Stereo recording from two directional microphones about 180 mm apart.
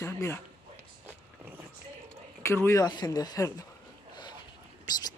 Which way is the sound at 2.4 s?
15° left (ahead or behind).